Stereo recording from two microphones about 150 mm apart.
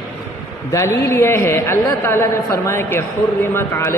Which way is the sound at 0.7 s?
20° left (ahead or behind).